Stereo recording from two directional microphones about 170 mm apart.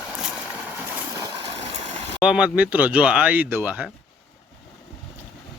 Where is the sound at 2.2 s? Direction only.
5° right (ahead or behind).